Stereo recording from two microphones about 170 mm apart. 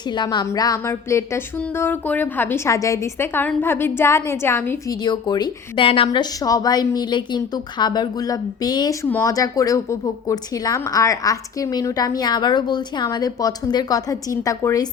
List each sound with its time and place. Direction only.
0.1 s a woman's voice: 25° left (ahead or behind)
5.0 s a woman's voice: 25° left (ahead or behind)